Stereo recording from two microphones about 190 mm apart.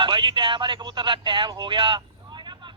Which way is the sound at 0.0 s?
25° right (ahead or behind).